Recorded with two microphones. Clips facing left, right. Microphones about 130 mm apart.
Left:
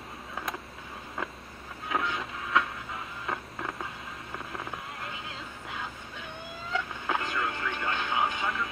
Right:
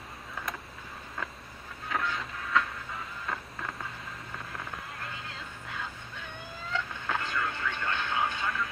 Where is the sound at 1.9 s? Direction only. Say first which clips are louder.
Left 2 dB; 15° left (ahead or behind).